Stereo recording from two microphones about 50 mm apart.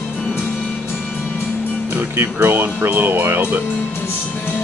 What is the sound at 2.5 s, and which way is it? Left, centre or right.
Speech, right.